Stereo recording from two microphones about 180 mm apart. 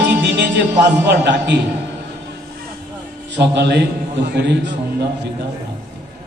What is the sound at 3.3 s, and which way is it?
Music, 70° right (ahead or behind).